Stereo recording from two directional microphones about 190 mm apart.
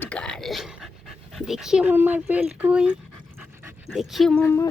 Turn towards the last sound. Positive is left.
turn(degrees=15)  # may be behind; listen again after turning